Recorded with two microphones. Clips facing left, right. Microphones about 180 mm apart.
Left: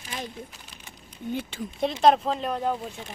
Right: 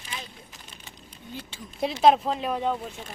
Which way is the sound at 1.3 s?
60° left (ahead or behind).